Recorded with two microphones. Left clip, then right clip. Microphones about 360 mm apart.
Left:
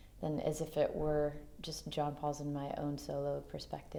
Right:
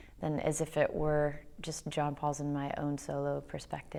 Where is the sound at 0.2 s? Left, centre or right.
Right.